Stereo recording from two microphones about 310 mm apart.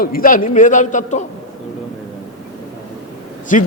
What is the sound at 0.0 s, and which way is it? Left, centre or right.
A man's voice, left.